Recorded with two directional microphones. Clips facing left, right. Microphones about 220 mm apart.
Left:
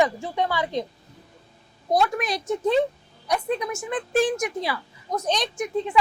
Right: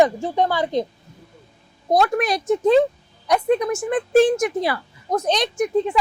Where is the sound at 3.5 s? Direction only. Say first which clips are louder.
Right 7 dB; 50° right (ahead or behind).